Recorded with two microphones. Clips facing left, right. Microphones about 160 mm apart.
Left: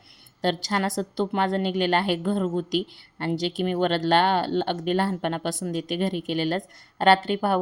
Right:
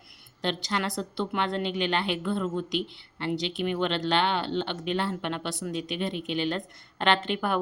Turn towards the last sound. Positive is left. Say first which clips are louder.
# left 6 dB
turn(degrees=35)  # may be behind; listen again after turning